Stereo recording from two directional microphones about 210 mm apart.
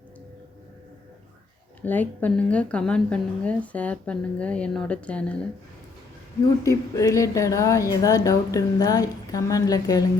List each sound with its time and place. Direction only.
1.8 s a woman's voice: 10° left (ahead or behind)
6.6 s speech: 15° left (ahead or behind)